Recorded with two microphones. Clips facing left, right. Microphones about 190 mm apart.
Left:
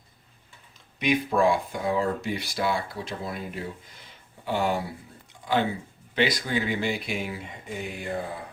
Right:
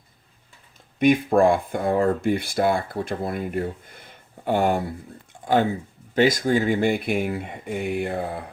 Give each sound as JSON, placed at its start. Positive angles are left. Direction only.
{"t": 0.9, "sound": "speech", "side_deg": -50}